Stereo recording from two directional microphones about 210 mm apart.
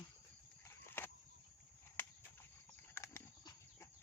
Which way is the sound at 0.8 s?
10° left (ahead or behind).